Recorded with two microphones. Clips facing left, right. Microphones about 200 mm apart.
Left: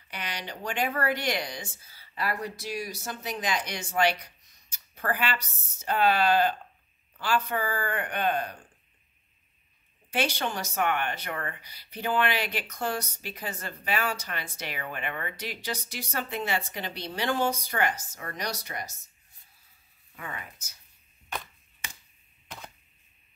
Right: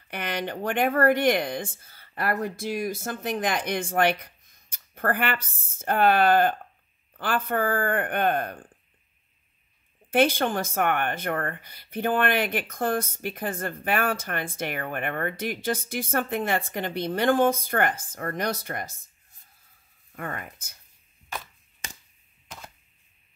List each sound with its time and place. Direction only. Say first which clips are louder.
0.1 s speech: right 7 dB; 55° right (ahead or behind)
10.1 s speech: right 8 dB; 50° right (ahead or behind)
20.1 s speech: right 6 dB; 50° right (ahead or behind)